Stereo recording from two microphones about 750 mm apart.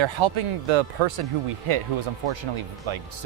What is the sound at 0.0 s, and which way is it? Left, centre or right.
Speech, right.